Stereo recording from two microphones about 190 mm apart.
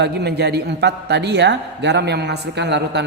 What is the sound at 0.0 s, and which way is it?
A man's voice, 60° right (ahead or behind).